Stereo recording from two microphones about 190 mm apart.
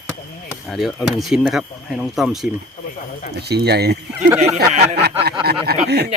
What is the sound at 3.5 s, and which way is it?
Speech, 60° right (ahead or behind).